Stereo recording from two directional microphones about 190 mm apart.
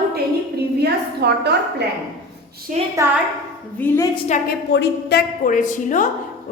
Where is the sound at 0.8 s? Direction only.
60° right (ahead or behind).